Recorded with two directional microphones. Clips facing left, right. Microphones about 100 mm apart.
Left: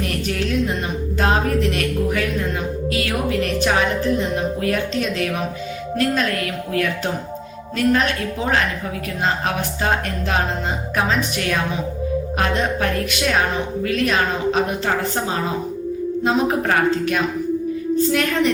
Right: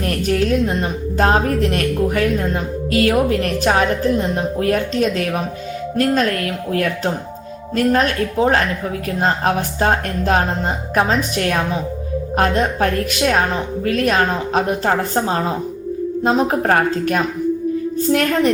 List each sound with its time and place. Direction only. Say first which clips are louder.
0.0 s speech: right 5 dB; 40° right (ahead or behind)